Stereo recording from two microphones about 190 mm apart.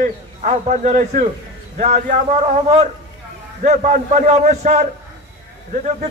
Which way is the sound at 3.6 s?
35° right (ahead or behind).